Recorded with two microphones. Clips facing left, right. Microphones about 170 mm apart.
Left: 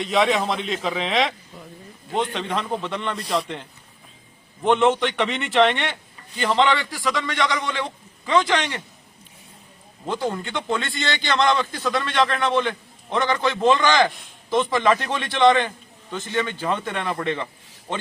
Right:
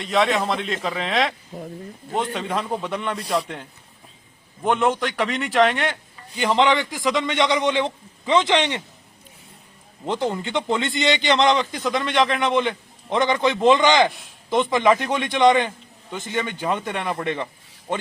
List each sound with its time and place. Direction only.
0.0 s a man's voice: centre (ahead or behind)
1.5 s speech: 40° right (ahead or behind)
2.1 s a man's voice: 10° right (ahead or behind)
10.1 s a man's voice: 20° right (ahead or behind)